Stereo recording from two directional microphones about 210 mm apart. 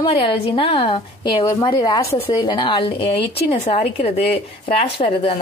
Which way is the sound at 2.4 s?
25° left (ahead or behind).